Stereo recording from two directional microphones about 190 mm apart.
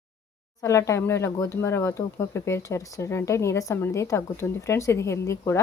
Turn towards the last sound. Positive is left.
turn(degrees=15)  # may be behind; listen again after turning